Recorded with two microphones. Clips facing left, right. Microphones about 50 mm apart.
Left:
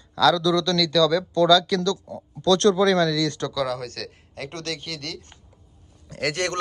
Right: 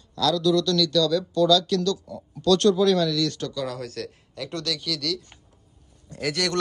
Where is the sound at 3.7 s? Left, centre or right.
Left.